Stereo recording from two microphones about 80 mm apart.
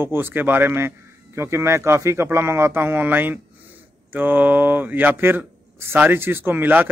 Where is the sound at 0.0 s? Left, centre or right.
Right.